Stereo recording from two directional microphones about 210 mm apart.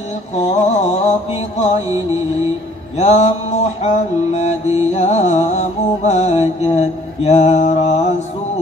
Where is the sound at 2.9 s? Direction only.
30° left (ahead or behind).